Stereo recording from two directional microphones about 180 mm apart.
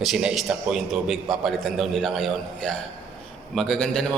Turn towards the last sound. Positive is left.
turn(degrees=5)  # may be behind; listen again after turning